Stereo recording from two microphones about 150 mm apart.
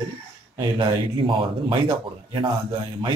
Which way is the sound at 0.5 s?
35° right (ahead or behind).